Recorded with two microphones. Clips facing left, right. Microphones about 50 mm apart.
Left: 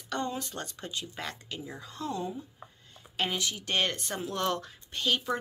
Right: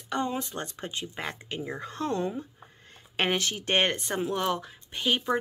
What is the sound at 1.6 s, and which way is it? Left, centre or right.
Speech, right.